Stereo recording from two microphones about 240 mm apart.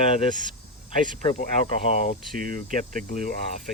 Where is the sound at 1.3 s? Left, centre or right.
Left.